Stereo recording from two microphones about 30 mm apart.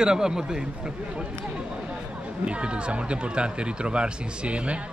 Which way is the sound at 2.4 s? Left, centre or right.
Right.